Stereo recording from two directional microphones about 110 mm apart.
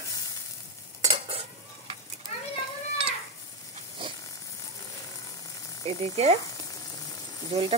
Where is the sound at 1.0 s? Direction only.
55° right (ahead or behind).